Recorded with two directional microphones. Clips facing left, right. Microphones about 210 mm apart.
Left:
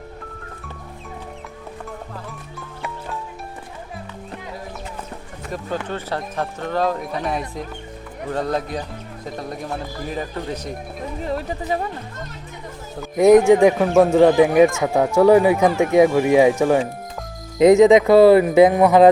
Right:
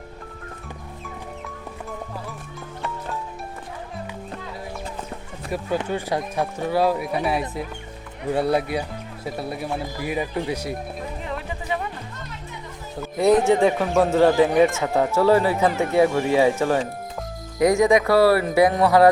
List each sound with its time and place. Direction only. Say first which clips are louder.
5.5 s speech: right 2 dB; 15° right (ahead or behind)
11.2 s music: left 6 dB; 40° left (ahead or behind)
13.1 s speech: left 6 dB; 15° left (ahead or behind)